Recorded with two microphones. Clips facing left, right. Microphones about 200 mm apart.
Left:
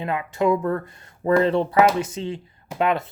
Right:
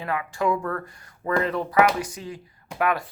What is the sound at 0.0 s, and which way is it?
Speech, 20° left (ahead or behind).